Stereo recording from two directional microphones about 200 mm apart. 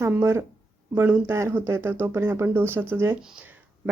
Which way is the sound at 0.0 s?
15° right (ahead or behind).